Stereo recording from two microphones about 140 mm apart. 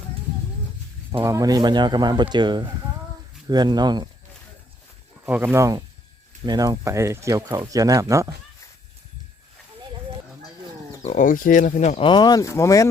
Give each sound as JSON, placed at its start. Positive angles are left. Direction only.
{"t": 1.2, "sound": "speech", "side_deg": -25}
{"t": 5.2, "sound": "speech", "side_deg": -10}
{"t": 11.1, "sound": "speech", "side_deg": 70}
{"t": 11.9, "sound": "speech", "side_deg": 35}